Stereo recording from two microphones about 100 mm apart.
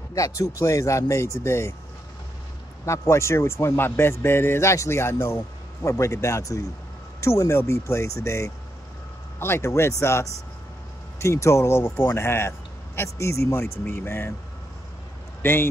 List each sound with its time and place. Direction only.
0.1 s speech: 35° left (ahead or behind)
2.8 s speech: 30° left (ahead or behind)
15.4 s speech: 20° left (ahead or behind)